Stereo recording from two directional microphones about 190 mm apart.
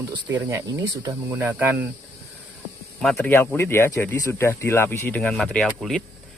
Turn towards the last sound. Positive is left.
turn(degrees=0)  # may be behind; listen again after turning